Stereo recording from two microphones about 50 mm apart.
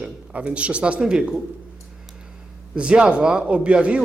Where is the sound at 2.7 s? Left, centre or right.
Right.